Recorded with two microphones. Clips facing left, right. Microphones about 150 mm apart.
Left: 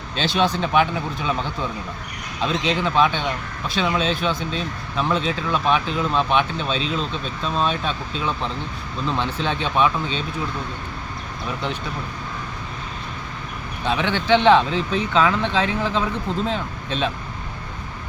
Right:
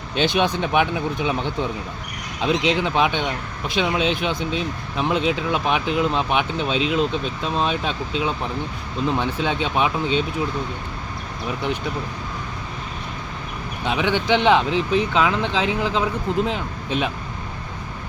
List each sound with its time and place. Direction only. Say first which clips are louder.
0.2 s speech: right 1 dB; 15° right (ahead or behind)
2.4 s speech: right 2 dB; 15° right (ahead or behind)
13.8 s speech: right 1 dB; 15° right (ahead or behind)